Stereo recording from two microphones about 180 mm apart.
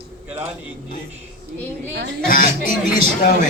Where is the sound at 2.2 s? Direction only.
50° left (ahead or behind).